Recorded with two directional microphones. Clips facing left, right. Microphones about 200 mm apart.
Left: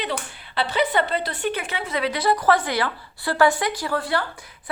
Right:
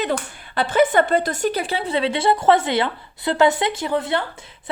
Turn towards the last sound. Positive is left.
turn(degrees=-20)  # may be behind; listen again after turning